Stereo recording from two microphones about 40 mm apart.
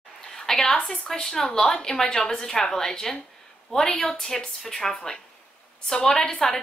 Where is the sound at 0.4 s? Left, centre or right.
Centre.